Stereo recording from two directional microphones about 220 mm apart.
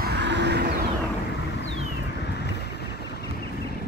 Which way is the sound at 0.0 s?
50° right (ahead or behind).